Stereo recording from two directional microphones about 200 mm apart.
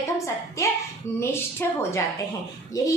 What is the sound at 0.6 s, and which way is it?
A woman's voice, 15° left (ahead or behind).